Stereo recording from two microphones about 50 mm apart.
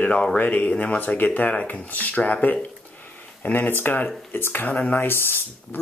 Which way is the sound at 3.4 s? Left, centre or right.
Left.